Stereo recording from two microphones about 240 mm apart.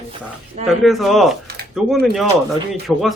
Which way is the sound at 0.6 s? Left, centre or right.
Centre.